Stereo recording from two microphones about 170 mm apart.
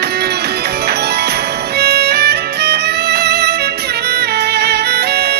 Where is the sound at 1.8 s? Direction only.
70° right (ahead or behind).